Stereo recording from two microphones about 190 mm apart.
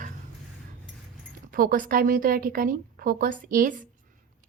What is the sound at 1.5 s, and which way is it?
Speech, 50° right (ahead or behind).